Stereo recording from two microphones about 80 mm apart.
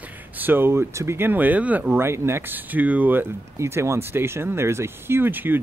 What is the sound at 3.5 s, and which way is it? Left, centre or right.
Speech, right.